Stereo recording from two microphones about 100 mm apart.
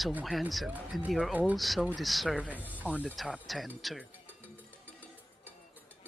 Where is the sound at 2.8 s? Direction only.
15° right (ahead or behind).